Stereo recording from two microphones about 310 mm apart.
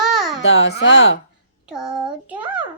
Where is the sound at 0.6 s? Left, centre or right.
Left.